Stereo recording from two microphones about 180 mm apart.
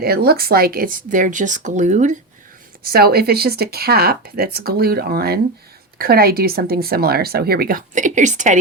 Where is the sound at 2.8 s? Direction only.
60° right (ahead or behind).